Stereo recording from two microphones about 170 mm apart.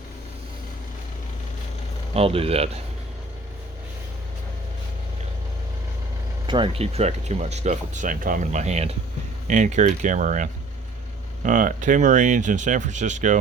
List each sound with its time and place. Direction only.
2.1 s speech: 35° right (ahead or behind)
6.5 s speech: 30° right (ahead or behind)